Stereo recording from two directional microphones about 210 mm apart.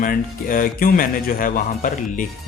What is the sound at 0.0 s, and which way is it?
Speech, 40° left (ahead or behind).